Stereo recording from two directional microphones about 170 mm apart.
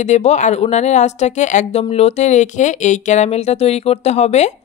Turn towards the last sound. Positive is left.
turn(degrees=40)  # may be behind; listen again after turning